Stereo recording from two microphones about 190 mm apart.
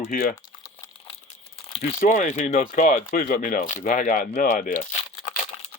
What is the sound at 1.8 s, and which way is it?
Speech, 40° left (ahead or behind).